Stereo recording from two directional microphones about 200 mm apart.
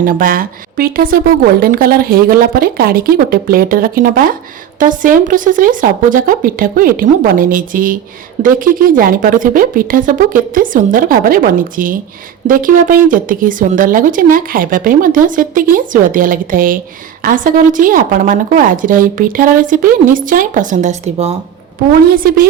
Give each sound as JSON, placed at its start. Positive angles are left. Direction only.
{"t": 0.0, "sound": "a woman's voice", "side_deg": -45}
{"t": 22.1, "sound": "speech", "side_deg": -45}